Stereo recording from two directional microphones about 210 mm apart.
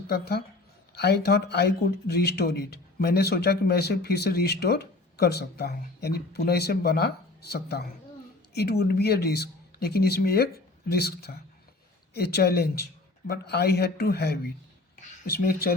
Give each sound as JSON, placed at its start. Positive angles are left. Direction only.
{"t": 0.1, "sound": "speech", "side_deg": 50}